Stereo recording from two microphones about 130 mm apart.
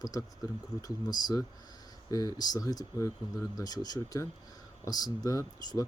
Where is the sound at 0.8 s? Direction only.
30° left (ahead or behind).